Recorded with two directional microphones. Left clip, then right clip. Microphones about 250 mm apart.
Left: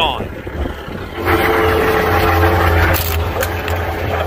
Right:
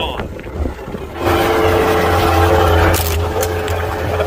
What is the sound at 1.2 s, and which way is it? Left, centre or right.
Vehicle, right.